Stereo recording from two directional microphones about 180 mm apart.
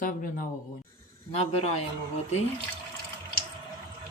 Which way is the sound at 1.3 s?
35° left (ahead or behind).